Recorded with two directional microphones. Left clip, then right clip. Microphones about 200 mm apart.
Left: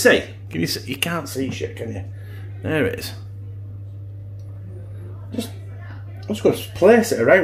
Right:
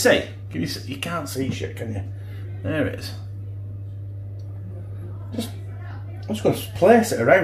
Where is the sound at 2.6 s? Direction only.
65° left (ahead or behind).